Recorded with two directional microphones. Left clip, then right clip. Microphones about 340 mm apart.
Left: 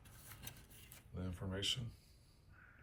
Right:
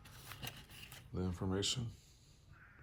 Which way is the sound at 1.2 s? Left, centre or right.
Centre.